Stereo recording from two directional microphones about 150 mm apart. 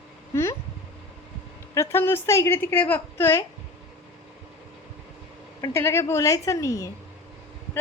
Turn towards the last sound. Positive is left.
turn(degrees=20)  # may be behind; listen again after turning